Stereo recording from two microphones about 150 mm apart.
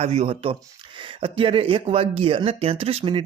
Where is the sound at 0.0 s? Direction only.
45° right (ahead or behind).